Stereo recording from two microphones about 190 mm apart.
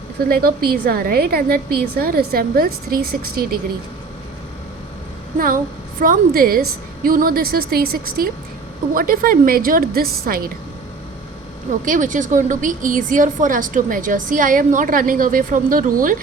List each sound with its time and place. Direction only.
0.3 s a woman's voice: 55° right (ahead or behind)
6.0 s a woman's voice: 50° right (ahead or behind)
11.9 s a woman's voice: 40° right (ahead or behind)